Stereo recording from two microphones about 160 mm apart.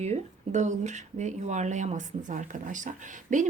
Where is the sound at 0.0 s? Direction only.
45° right (ahead or behind).